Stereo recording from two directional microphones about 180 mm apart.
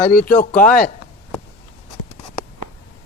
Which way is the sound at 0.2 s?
55° left (ahead or behind).